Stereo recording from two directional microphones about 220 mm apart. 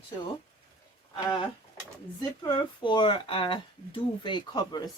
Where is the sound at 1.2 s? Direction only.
20° left (ahead or behind).